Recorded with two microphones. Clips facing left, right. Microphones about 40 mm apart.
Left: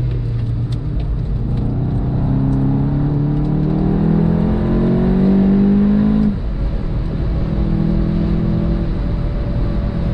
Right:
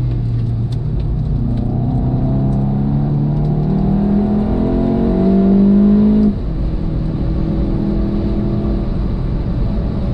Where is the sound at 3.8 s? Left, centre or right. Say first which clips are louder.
Right 2 dB; centre.